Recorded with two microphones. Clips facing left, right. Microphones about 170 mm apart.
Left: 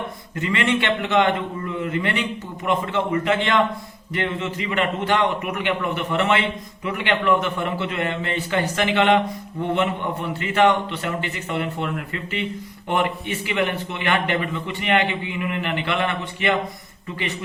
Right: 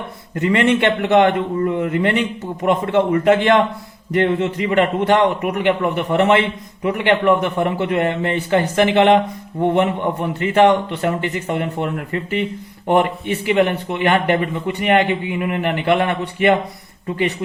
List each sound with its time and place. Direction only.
0.4 s a man's voice: 45° right (ahead or behind)